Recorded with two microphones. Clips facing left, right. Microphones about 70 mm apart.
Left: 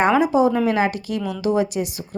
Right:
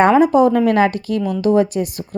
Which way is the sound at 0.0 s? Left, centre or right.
Right.